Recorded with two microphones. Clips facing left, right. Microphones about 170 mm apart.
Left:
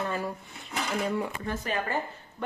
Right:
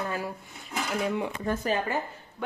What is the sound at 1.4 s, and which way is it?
Speech, 35° right (ahead or behind).